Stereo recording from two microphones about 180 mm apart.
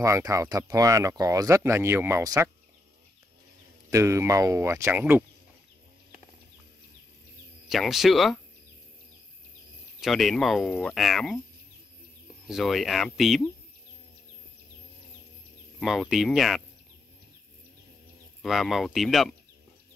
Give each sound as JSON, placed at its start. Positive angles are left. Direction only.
{"t": 0.0, "sound": "speech", "side_deg": -15}
{"t": 3.9, "sound": "speech", "side_deg": -15}
{"t": 7.6, "sound": "speech", "side_deg": 0}
{"t": 9.9, "sound": "speech", "side_deg": 0}
{"t": 12.4, "sound": "speech", "side_deg": 0}
{"t": 15.8, "sound": "speech", "side_deg": 0}
{"t": 18.4, "sound": "speech", "side_deg": 0}